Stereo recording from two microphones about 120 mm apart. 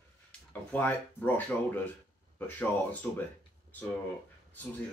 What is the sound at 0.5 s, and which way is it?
Speech, 15° left (ahead or behind).